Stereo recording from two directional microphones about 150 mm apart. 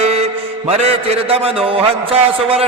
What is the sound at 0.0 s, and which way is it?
Mantra, 45° right (ahead or behind).